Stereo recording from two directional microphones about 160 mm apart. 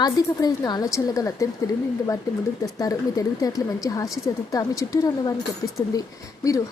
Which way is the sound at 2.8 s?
20° left (ahead or behind).